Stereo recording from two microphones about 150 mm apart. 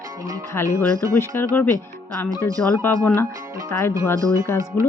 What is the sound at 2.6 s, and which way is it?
Speech, 5° left (ahead or behind).